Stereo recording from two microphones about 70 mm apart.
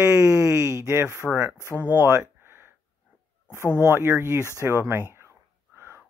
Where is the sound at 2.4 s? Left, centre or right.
Right.